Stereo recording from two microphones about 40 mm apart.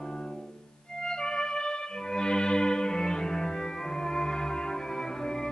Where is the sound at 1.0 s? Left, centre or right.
Centre.